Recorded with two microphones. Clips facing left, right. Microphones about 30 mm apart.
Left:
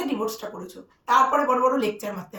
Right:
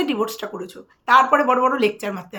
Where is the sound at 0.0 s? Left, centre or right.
Right.